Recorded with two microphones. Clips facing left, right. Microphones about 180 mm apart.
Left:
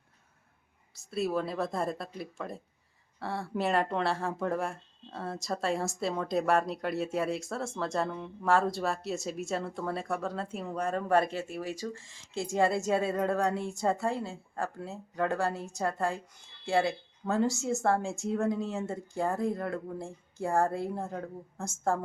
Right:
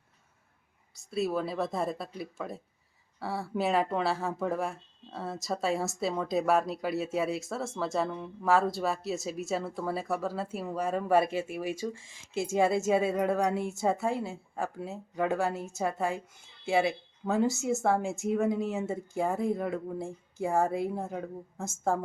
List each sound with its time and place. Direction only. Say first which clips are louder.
0.9 s speech: right 1 dB; centre (ahead or behind)
12.3 s a woman's voice: right 3 dB; 25° right (ahead or behind)
12.9 s speech: right 2 dB; 10° right (ahead or behind)
15.5 s a woman's voice: right 1 dB; 20° right (ahead or behind)
15.9 s speech: even; 10° right (ahead or behind)
17.4 s a woman's voice: right 1 dB; 20° right (ahead or behind)
18.3 s speech: right 2 dB; 5° right (ahead or behind)